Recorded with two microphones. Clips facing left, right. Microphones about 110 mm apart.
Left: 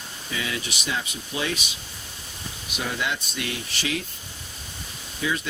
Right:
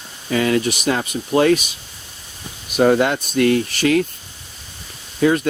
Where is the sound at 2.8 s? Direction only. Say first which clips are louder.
Right 14 dB; 50° right (ahead or behind).